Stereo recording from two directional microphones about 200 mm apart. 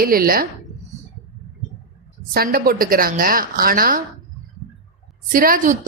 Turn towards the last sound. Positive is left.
turn(degrees=-45)  # may be behind; listen again after turning